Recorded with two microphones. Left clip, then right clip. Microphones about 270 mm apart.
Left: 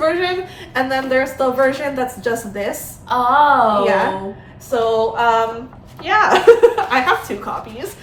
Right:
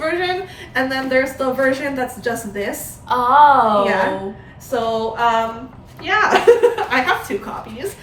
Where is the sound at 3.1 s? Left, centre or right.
Centre.